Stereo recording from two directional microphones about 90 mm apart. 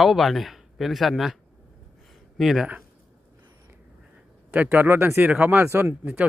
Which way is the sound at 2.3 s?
Centre (ahead or behind).